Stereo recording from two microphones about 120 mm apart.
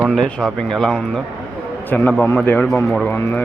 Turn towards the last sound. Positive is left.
turn(degrees=15)  # may be behind; listen again after turning